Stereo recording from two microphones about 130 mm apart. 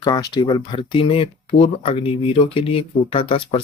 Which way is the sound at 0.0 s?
35° left (ahead or behind).